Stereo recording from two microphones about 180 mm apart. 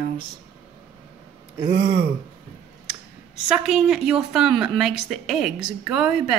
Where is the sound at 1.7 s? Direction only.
75° right (ahead or behind).